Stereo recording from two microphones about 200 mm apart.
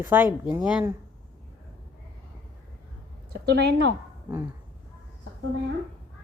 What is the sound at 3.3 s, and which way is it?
Speech, 55° right (ahead or behind).